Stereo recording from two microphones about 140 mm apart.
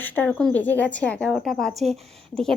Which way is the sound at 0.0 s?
10° left (ahead or behind).